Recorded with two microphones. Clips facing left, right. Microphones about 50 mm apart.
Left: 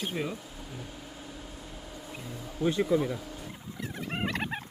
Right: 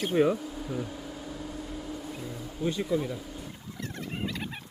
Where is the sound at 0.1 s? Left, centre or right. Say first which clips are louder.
Right 15 dB; right.